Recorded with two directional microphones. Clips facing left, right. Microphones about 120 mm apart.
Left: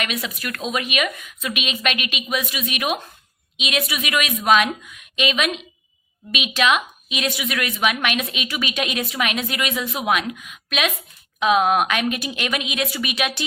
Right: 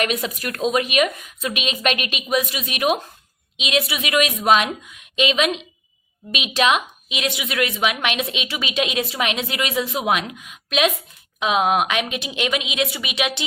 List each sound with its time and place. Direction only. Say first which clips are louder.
0.0 s a woman's voice: right 4 dB; 40° right (ahead or behind)
11.3 s a woman's voice: left 1 dB; 20° right (ahead or behind)